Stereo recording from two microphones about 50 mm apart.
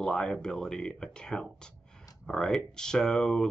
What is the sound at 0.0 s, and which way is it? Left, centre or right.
Speech, centre.